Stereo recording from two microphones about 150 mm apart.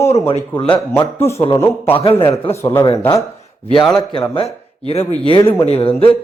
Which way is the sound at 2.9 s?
20° left (ahead or behind).